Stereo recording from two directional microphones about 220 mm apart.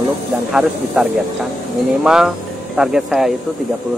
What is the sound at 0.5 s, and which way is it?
Speech, 5° right (ahead or behind).